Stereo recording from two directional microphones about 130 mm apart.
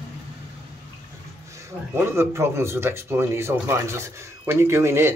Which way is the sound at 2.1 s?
20° right (ahead or behind).